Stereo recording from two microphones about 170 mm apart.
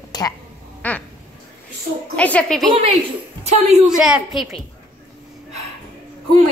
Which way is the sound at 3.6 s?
40° right (ahead or behind).